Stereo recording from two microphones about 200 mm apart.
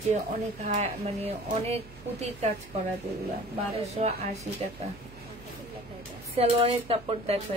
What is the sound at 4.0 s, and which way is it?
Speech, 35° right (ahead or behind).